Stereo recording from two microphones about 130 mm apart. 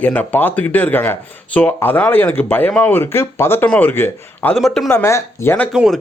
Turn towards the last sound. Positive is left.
turn(degrees=0)  # may be behind; listen again after turning